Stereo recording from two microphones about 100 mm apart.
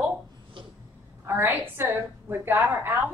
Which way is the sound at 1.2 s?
20° right (ahead or behind).